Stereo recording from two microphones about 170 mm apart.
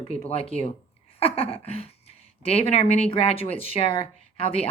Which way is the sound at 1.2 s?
35° left (ahead or behind).